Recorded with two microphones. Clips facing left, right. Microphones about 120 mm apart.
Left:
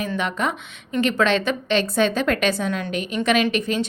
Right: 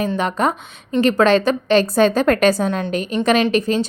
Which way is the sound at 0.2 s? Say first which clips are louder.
Right 5 dB; 40° right (ahead or behind).